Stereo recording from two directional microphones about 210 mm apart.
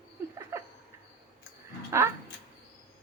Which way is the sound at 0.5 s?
15° right (ahead or behind).